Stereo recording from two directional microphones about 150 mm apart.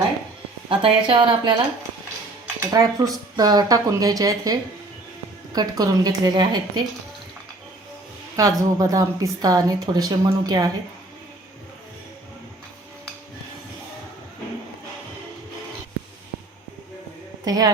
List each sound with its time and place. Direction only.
0.7 s speech: 35° right (ahead or behind)
2.6 s a woman's voice: 25° right (ahead or behind)
5.5 s a woman's voice: 25° right (ahead or behind)
8.4 s a woman's voice: 25° right (ahead or behind)
17.4 s speech: 25° right (ahead or behind)